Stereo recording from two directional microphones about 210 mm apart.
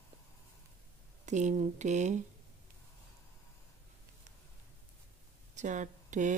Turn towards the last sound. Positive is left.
turn(degrees=-35)  # may be behind; listen again after turning